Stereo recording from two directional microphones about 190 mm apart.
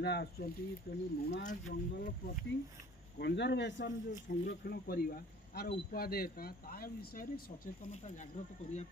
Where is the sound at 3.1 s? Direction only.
60° left (ahead or behind).